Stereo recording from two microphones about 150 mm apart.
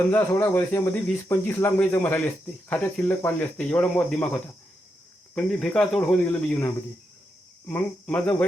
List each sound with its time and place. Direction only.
0.1 s speech: 15° left (ahead or behind)
5.3 s speech: 5° left (ahead or behind)
7.7 s speech: 10° left (ahead or behind)